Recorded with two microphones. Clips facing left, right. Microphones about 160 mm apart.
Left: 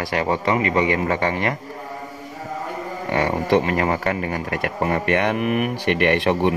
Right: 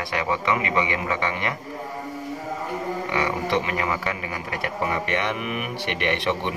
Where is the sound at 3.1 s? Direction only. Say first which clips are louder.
Left 7 dB; 45° left (ahead or behind).